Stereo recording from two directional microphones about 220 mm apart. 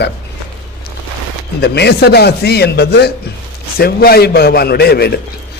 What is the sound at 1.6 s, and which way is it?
A man's voice, 50° left (ahead or behind).